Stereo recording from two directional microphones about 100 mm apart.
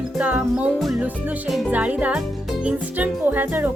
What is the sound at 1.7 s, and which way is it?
Speech, 15° right (ahead or behind).